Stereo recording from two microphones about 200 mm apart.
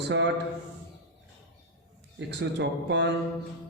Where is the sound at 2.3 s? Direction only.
60° right (ahead or behind).